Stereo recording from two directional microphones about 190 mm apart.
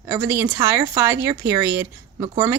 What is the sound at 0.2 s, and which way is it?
Speech, 15° right (ahead or behind).